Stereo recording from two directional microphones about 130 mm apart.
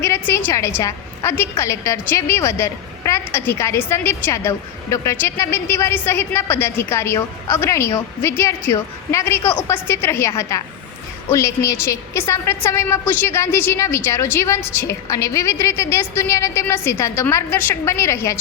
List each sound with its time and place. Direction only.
0.0 s a woman's voice: 20° left (ahead or behind)